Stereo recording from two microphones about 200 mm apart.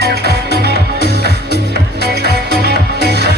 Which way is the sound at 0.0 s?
55° right (ahead or behind).